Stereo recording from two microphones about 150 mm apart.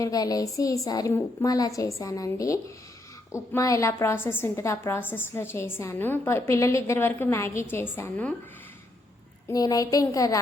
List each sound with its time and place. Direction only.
0.0 s a woman's voice: 25° left (ahead or behind)
9.5 s a woman's voice: 25° left (ahead or behind)